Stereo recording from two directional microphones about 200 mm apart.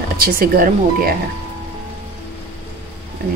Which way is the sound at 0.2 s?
45° right (ahead or behind).